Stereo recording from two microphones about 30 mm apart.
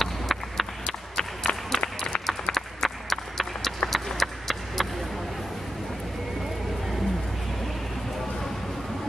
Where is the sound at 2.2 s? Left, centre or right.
Centre.